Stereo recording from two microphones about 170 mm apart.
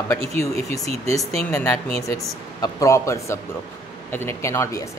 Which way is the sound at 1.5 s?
15° left (ahead or behind).